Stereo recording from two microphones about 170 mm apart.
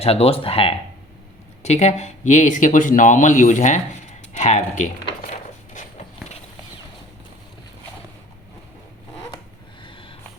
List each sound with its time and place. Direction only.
0.0 s speech: 35° left (ahead or behind)
4.4 s a sound: 45° left (ahead or behind)
9.8 s snort: 30° left (ahead or behind)